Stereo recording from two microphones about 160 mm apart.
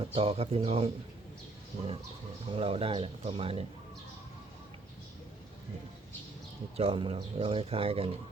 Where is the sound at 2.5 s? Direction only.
35° right (ahead or behind).